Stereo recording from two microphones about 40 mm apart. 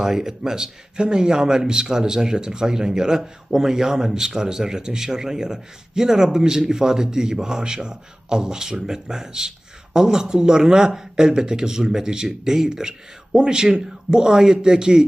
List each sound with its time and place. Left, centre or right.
0.0 s speech: centre